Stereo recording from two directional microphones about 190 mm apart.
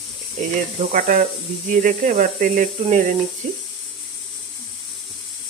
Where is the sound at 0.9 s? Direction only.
45° right (ahead or behind).